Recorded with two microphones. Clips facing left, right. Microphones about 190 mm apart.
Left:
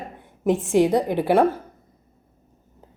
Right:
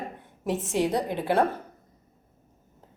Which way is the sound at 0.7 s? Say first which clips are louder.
Left 7 dB; 65° left (ahead or behind).